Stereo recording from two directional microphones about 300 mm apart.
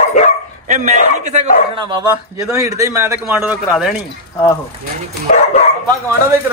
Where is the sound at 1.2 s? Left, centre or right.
Right.